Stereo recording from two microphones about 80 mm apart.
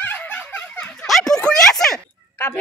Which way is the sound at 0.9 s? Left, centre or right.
Centre.